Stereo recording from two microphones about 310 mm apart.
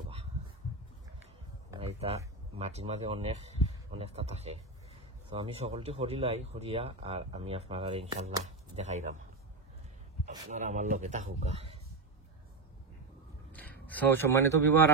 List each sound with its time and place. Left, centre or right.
1.7 s speech: centre
10.3 s speech: right
13.5 s a sound: centre